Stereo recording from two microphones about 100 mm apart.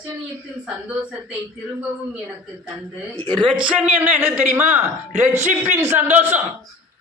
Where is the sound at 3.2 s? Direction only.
45° right (ahead or behind).